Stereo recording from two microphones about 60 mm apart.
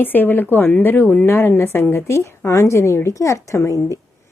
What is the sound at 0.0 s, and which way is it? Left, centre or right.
A woman's voice, left.